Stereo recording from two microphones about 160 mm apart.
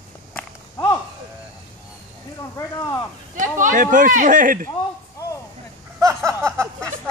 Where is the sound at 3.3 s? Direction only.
55° right (ahead or behind).